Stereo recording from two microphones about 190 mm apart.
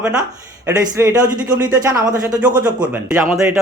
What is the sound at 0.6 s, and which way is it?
Speech, 15° right (ahead or behind).